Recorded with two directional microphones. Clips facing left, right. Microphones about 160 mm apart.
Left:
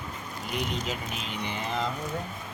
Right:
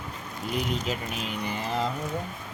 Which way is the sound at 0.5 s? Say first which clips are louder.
Right 2 dB; centre (ahead or behind).